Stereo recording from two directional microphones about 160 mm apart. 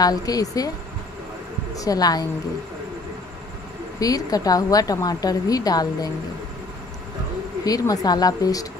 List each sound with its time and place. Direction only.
0.0 s a woman's voice: 25° left (ahead or behind)
1.8 s a woman's voice: 25° left (ahead or behind)
4.0 s a woman's voice: 20° left (ahead or behind)
7.6 s a woman's voice: 25° left (ahead or behind)